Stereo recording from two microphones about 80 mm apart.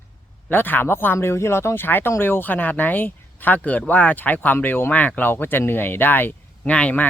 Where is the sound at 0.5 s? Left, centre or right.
Left.